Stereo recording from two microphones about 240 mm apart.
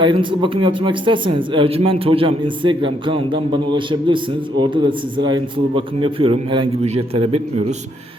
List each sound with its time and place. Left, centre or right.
0.0 s speech: right